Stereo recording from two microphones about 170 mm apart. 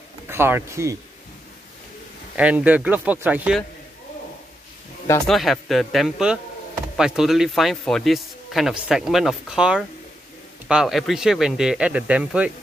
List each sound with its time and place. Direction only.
0.3 s speech: 15° right (ahead or behind)
2.3 s speech: 10° right (ahead or behind)
5.3 s speech: centre (ahead or behind)